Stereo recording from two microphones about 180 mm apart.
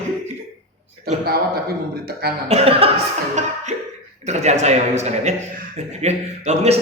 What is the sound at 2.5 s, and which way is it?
A man's voice, 30° right (ahead or behind).